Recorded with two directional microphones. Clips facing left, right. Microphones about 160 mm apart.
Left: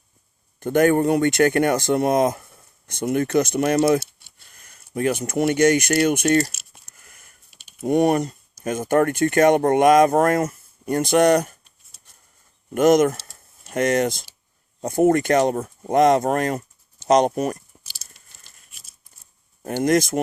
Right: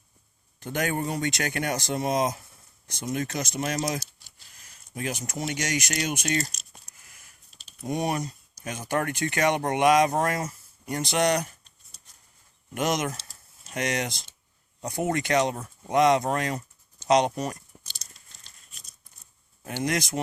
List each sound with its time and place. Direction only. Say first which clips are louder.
0.6 s speech: left 12 dB; 50° left (ahead or behind)
6.9 s a sound: left 4 dB; 50° left (ahead or behind)
7.9 s speech: left 10 dB; 55° left (ahead or behind)
12.7 s speech: left 12 dB; 50° left (ahead or behind)
17.8 s tearing: even; 5° left (ahead or behind)
18.7 s a sound: even; 5° left (ahead or behind)
19.6 s speech: left 9 dB; 45° left (ahead or behind)